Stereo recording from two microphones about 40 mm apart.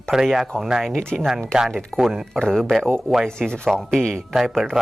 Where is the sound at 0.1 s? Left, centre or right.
Centre.